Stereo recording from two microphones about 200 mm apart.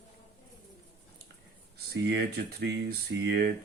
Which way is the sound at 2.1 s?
55° right (ahead or behind).